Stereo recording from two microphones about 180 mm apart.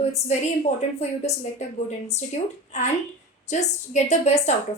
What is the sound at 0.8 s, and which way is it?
A woman's voice, 40° left (ahead or behind).